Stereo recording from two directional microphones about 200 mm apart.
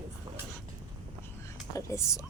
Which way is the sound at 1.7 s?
15° left (ahead or behind).